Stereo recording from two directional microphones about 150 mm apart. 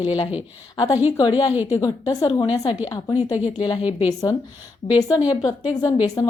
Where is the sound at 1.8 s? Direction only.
25° left (ahead or behind).